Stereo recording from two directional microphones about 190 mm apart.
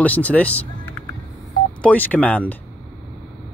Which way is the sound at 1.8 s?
5° left (ahead or behind).